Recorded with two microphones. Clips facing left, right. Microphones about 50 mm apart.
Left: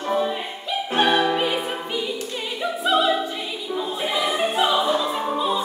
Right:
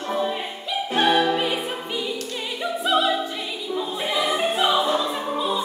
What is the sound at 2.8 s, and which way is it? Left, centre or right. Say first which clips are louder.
Opera: left 1 dB; centre.